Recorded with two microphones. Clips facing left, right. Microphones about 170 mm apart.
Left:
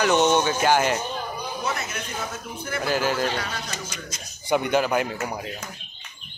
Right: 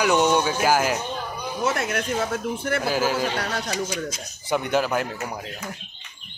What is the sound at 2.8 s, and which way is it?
Speech, 5° right (ahead or behind).